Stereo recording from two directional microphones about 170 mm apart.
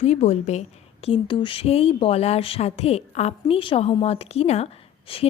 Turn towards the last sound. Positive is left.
turn(degrees=30)  # may be behind; listen again after turning